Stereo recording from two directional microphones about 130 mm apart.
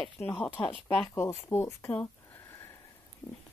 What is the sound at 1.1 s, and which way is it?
Speech, 20° left (ahead or behind).